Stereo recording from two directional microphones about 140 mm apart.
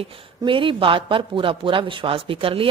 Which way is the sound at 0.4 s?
35° right (ahead or behind).